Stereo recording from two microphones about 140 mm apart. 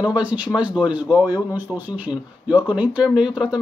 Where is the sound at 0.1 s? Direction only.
10° right (ahead or behind).